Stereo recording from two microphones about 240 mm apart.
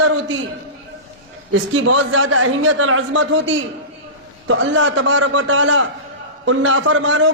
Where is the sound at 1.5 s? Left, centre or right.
Right.